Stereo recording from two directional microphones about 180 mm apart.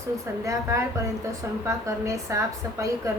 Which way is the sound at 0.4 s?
15° right (ahead or behind).